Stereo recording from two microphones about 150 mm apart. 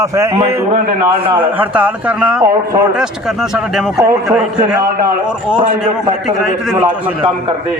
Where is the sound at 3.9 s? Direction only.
20° right (ahead or behind).